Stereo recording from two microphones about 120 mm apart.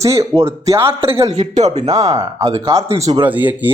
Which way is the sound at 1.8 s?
30° right (ahead or behind).